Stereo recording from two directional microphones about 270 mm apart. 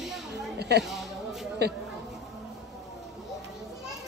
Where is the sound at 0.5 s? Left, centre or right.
Right.